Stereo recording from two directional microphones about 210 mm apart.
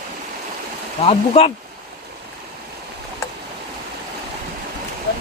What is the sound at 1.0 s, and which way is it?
Speech, 30° left (ahead or behind).